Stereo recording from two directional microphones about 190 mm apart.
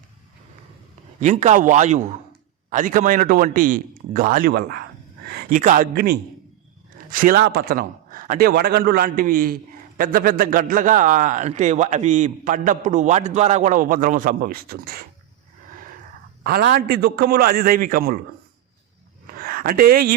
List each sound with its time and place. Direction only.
1.2 s a man's voice: 40° right (ahead or behind)
16.4 s a man's voice: 55° right (ahead or behind)
19.3 s a sound: 50° right (ahead or behind)